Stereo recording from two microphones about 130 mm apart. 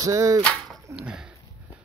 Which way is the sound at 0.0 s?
25° right (ahead or behind).